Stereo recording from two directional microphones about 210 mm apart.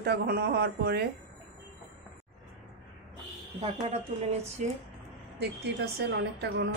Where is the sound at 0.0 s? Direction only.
50° right (ahead or behind).